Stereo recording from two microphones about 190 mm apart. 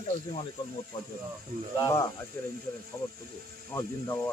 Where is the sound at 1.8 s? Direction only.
15° left (ahead or behind).